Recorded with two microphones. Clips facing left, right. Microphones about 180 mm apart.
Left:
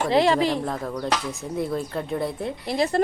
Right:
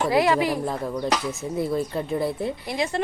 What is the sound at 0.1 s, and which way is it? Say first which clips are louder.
Speech: left 2 dB; 25° left (ahead or behind).